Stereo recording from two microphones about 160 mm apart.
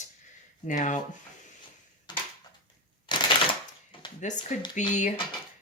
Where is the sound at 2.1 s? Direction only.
25° left (ahead or behind).